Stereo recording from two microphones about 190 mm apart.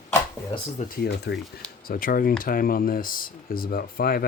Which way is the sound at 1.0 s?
60° left (ahead or behind).